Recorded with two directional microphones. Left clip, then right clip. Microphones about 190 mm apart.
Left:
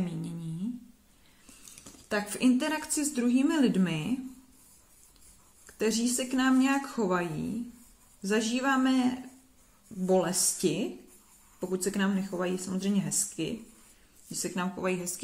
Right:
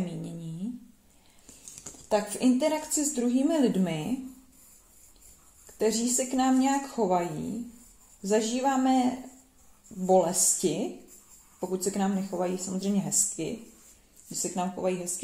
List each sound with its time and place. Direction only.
0.0 s humming: 45° left (ahead or behind)
2.0 s a woman's voice: 40° left (ahead or behind)
5.8 s a woman's voice: 40° left (ahead or behind)